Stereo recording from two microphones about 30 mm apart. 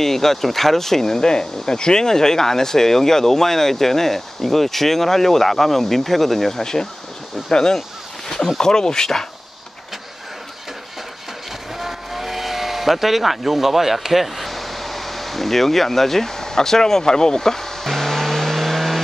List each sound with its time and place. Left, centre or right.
0.0 s speech: centre
6.6 s speech: centre
11.8 s vehicle: centre